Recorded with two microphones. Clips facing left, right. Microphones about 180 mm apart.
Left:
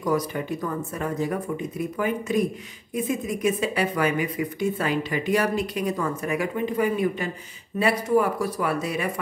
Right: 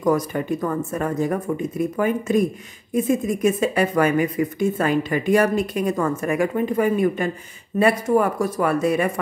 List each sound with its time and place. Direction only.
0.0 s speech: 50° right (ahead or behind)